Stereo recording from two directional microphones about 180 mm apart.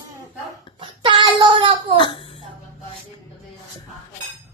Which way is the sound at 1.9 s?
25° left (ahead or behind).